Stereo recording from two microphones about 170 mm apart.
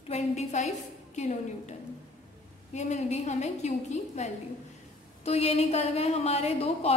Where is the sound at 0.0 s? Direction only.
40° left (ahead or behind).